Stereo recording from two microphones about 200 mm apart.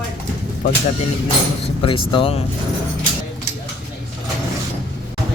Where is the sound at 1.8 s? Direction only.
25° left (ahead or behind).